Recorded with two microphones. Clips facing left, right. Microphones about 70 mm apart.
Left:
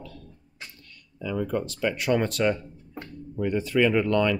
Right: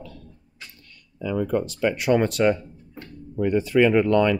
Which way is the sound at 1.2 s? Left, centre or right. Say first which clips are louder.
Right 4 dB; right.